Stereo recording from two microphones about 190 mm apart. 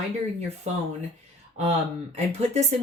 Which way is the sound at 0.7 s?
35° right (ahead or behind).